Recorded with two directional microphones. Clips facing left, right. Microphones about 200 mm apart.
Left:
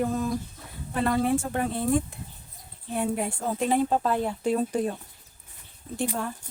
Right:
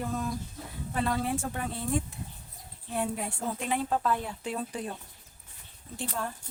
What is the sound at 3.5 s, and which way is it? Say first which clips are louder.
A woman's voice: left 8 dB; 35° left (ahead or behind).